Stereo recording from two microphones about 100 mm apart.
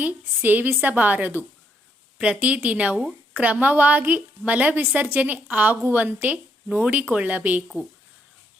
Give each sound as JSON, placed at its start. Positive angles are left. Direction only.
{"t": 0.0, "sound": "a woman's voice", "side_deg": -15}